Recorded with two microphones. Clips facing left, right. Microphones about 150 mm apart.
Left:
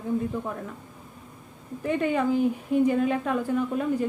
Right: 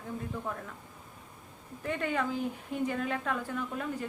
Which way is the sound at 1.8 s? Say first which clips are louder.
Left 7 dB; 15° left (ahead or behind).